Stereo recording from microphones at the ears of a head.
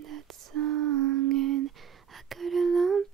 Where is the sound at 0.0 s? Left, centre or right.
Right.